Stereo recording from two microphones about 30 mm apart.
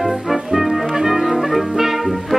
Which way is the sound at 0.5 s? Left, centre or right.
Centre.